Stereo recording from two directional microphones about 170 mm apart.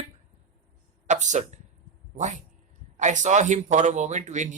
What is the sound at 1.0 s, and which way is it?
Speech, 45° right (ahead or behind).